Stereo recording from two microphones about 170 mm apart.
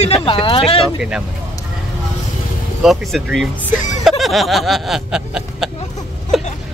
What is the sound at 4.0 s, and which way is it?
Snicker, centre (ahead or behind).